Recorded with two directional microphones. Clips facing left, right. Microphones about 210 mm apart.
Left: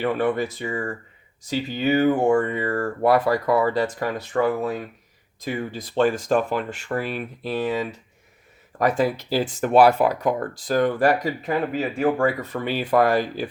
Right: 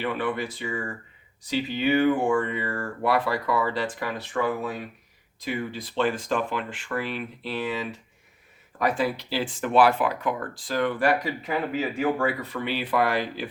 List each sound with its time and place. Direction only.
0.0 s speech: 45° left (ahead or behind)
8.8 s speech: 45° left (ahead or behind)